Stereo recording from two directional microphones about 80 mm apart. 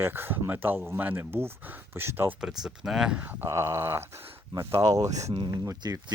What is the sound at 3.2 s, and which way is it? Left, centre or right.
Speech, right.